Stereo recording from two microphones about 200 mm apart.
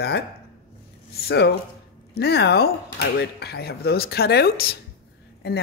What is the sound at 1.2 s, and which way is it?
Speech, 55° left (ahead or behind).